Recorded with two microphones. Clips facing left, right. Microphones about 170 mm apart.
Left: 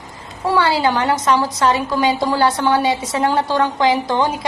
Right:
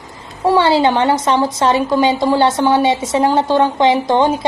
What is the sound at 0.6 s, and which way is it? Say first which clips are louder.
A woman's voice: right 3 dB; 25° right (ahead or behind).